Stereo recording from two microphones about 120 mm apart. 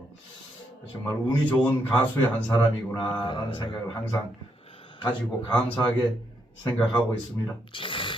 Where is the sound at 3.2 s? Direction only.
40° left (ahead or behind).